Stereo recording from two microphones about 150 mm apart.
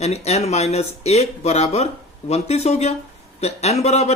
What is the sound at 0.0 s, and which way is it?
Speech, 45° left (ahead or behind).